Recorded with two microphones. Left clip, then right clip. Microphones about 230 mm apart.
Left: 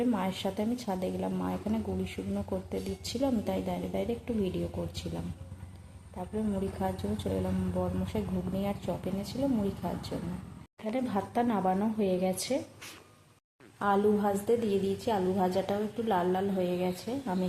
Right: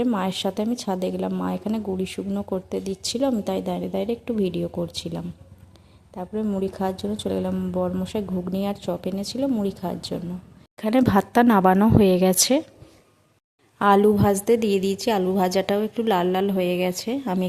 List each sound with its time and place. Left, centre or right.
0.0 s a woman's voice: right
13.7 s a woman's voice: right